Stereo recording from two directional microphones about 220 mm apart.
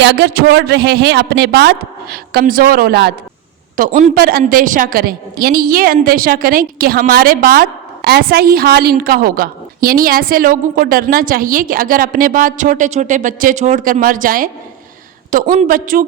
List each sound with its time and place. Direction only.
0.0 s a woman's voice: 50° right (ahead or behind)
3.8 s a woman's voice: 40° right (ahead or behind)